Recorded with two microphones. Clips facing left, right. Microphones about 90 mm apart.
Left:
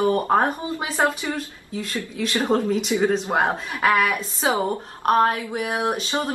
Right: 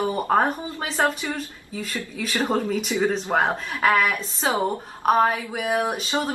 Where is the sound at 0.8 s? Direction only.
15° left (ahead or behind).